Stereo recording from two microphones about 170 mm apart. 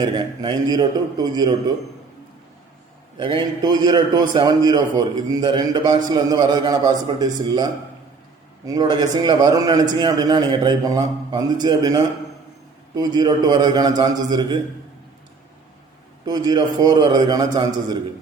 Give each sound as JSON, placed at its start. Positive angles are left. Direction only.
{"t": 0.0, "sound": "a man's voice", "side_deg": -25}
{"t": 3.2, "sound": "a man's voice", "side_deg": -30}
{"t": 16.2, "sound": "a man's voice", "side_deg": -25}